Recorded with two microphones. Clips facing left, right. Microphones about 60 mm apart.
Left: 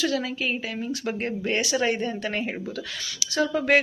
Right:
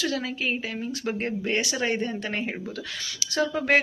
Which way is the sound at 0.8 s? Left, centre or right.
Centre.